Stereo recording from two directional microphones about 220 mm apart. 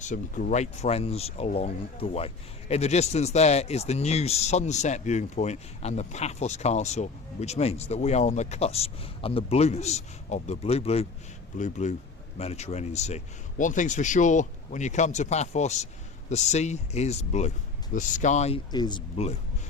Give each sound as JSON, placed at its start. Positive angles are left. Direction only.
{"t": 0.0, "sound": "speech", "side_deg": 35}